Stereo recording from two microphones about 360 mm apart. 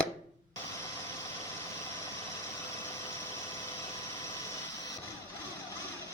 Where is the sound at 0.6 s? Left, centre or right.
Centre.